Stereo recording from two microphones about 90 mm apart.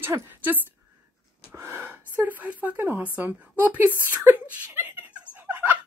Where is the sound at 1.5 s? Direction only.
25° right (ahead or behind).